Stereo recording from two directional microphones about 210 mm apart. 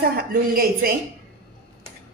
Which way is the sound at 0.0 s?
45° right (ahead or behind).